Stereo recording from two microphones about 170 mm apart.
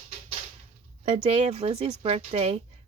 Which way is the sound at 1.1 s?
35° right (ahead or behind).